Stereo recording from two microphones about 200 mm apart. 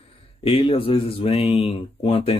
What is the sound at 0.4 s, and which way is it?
Speech, 25° left (ahead or behind).